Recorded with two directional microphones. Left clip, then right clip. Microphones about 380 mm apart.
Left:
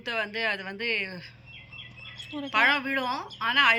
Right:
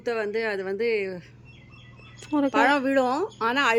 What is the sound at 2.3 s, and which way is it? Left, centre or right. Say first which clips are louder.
Speech: right 3 dB; centre.